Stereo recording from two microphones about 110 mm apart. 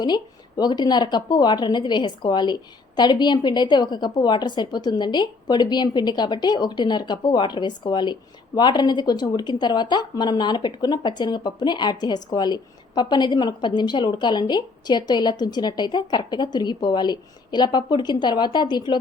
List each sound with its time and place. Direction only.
0.0 s speech: 40° left (ahead or behind)